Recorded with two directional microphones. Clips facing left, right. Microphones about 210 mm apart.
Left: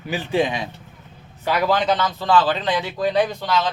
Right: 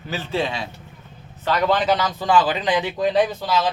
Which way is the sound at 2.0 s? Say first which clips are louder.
Even; 15° right (ahead or behind).